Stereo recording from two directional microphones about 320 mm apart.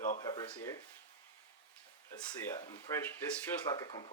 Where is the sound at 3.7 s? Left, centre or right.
Centre.